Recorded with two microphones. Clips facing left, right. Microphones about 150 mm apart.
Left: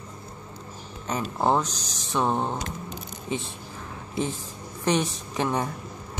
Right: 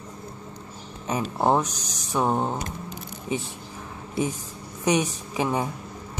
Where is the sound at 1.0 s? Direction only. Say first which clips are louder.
Right 2 dB; 10° right (ahead or behind).